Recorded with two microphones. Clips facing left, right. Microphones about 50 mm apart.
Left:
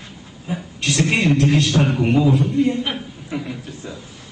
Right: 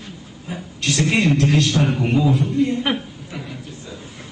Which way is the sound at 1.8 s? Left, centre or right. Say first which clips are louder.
Left 2 dB; centre.